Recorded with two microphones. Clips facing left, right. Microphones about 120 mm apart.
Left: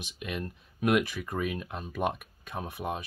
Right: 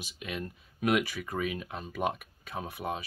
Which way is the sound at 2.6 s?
15° left (ahead or behind).